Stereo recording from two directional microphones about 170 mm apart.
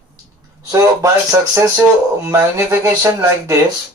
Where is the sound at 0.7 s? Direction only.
20° right (ahead or behind).